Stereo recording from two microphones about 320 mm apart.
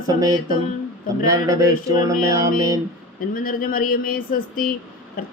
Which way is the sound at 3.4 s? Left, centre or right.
Left.